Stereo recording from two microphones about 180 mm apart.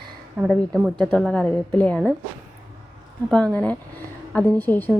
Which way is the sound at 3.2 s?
5° left (ahead or behind).